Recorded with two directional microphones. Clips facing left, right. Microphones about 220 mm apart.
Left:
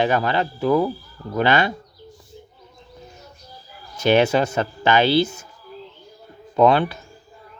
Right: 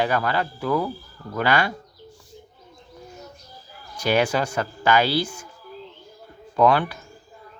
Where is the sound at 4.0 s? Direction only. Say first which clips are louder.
Left 5 dB; 25° left (ahead or behind).